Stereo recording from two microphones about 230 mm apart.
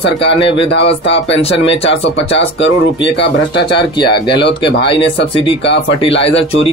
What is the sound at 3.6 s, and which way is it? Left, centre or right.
Speech, centre.